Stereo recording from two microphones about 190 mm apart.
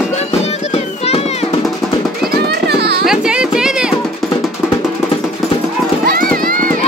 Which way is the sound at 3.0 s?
5° right (ahead or behind).